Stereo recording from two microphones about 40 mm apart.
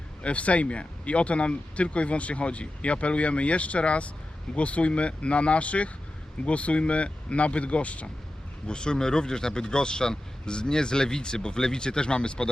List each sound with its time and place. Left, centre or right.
0.2 s speech: left
8.6 s speech: left